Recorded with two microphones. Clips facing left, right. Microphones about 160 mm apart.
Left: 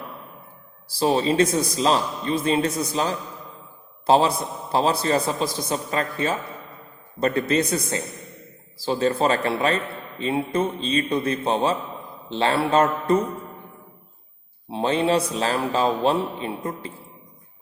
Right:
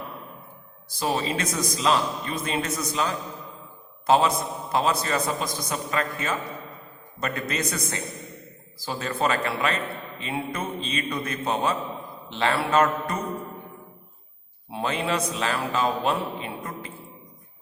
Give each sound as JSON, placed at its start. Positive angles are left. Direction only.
{"t": 0.9, "sound": "a man's voice", "side_deg": 30}
{"t": 14.7, "sound": "a man's voice", "side_deg": 30}